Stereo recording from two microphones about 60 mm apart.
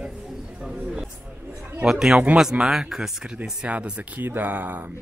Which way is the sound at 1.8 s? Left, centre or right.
Centre.